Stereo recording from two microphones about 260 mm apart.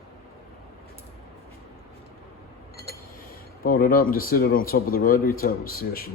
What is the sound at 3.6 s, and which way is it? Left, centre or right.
Speech, left.